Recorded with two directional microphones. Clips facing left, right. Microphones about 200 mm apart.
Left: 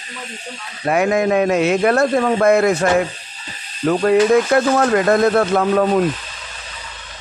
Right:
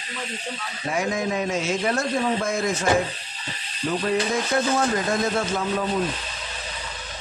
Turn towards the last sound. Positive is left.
turn(degrees=65)  # may be behind; listen again after turning